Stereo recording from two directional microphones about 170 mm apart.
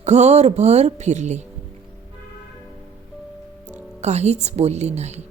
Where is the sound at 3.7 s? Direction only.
40° right (ahead or behind).